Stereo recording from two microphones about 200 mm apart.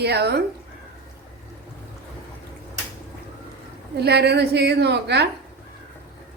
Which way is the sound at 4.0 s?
55° right (ahead or behind).